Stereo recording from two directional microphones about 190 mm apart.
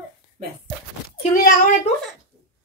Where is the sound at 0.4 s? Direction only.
45° right (ahead or behind).